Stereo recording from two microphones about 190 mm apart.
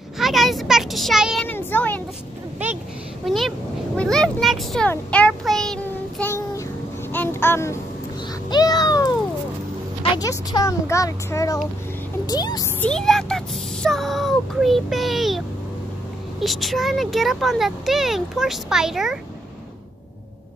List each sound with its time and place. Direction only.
0.2 s a sound: centre (ahead or behind)
1.5 s speech: 10° left (ahead or behind)
3.3 s a child's voice: centre (ahead or behind)
7.1 s a sound: 10° left (ahead or behind)
10.1 s speech: 20° left (ahead or behind)
12.8 s speech: 5° left (ahead or behind)